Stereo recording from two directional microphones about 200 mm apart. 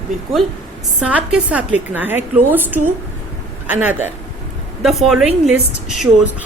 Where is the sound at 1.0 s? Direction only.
5° right (ahead or behind).